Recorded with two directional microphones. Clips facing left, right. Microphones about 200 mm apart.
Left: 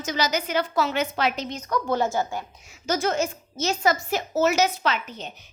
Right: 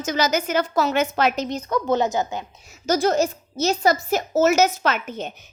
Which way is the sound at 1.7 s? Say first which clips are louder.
Right 3 dB; 20° right (ahead or behind).